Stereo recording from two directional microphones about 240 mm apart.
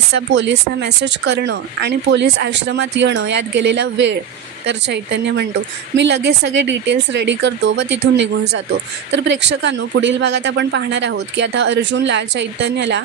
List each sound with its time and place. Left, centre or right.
0.1 s speech: right